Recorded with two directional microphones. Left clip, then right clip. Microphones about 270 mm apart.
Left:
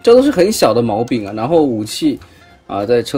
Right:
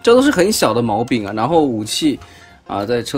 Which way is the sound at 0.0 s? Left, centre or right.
Centre.